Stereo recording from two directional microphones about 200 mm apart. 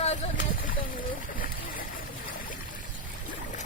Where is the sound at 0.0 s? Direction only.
35° left (ahead or behind).